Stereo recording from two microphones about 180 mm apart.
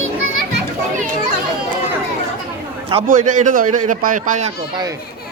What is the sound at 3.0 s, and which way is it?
A man's voice, 45° right (ahead or behind).